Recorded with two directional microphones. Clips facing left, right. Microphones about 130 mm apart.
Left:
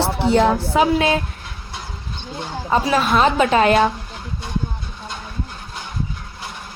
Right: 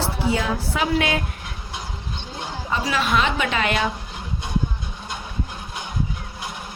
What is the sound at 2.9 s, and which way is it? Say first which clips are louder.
Speech: left 5 dB; 40° left (ahead or behind).